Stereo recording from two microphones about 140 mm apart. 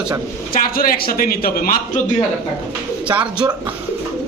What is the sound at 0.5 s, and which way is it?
Speech, 90° left.